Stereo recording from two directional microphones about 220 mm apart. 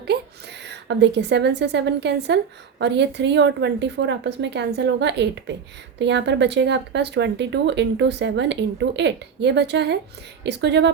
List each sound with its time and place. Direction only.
0.6 s a woman's voice: 50° right (ahead or behind)